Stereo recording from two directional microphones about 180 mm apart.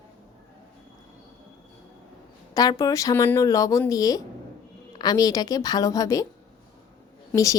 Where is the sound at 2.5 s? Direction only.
20° left (ahead or behind).